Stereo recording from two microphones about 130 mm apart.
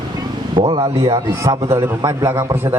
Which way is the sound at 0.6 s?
50° right (ahead or behind).